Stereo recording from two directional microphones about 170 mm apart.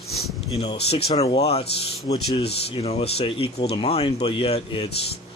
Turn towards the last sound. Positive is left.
turn(degrees=35)  # may be behind; listen again after turning